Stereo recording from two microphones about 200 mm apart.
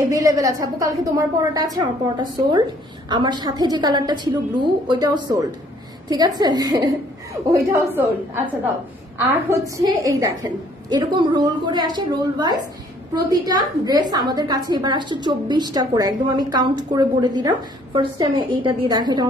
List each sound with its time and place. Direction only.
0.0 s a woman's voice: 15° right (ahead or behind)
9.3 s a woman's voice: 15° right (ahead or behind)